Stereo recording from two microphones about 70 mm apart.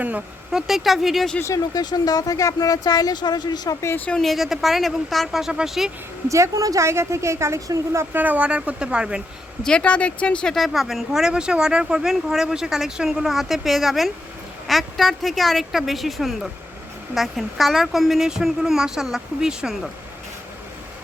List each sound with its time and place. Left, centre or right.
0.5 s speech: centre
1.5 s speech: left
4.1 s speech: centre
6.2 s a woman's voice: right
6.8 s a woman's voice: right
8.1 s speech: right
9.6 s speech: centre
10.5 s speech: centre